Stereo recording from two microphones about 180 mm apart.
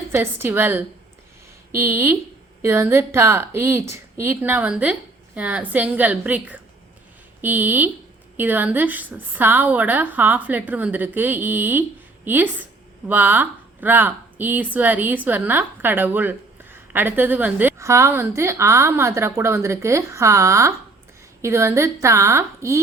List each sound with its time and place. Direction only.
0.1 s a woman's voice: 10° right (ahead or behind)